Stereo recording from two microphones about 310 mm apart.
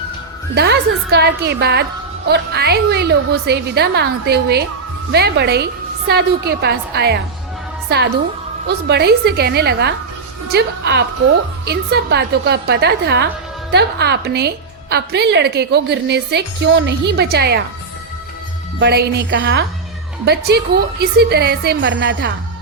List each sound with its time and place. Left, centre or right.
0.5 s a woman's voice: right
18.8 s a woman's voice: right